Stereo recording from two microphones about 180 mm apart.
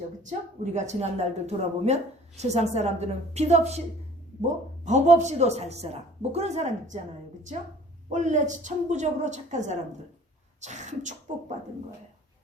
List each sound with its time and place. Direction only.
0.2 s speech: 45° right (ahead or behind)
4.9 s speech: 40° right (ahead or behind)
8.1 s speech: 40° right (ahead or behind)